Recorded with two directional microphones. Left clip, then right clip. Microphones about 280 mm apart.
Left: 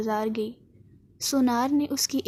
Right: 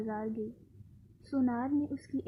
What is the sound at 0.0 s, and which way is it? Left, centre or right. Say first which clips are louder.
A woman's voice: left 10 dB; left.